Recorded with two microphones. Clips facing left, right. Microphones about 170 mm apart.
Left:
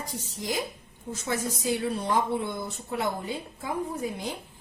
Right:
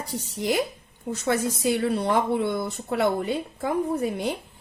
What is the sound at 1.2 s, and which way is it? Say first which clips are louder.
Speech: right 6 dB; 65° right (ahead or behind).